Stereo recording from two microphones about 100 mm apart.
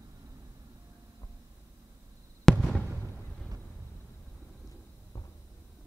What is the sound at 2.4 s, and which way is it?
Fireworks, centre (ahead or behind).